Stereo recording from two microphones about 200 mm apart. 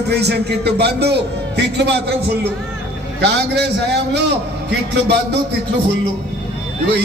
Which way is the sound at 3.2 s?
55° right (ahead or behind).